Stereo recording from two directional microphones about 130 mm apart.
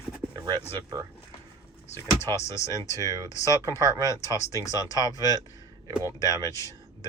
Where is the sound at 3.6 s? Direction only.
25° right (ahead or behind).